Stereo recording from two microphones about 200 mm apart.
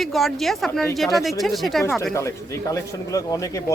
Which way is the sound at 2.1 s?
15° left (ahead or behind).